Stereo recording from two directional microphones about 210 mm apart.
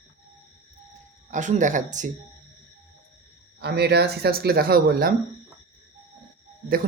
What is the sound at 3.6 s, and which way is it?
Speech, 50° right (ahead or behind).